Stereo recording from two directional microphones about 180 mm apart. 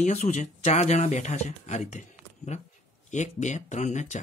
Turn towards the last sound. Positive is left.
turn(degrees=40)  # may be behind; listen again after turning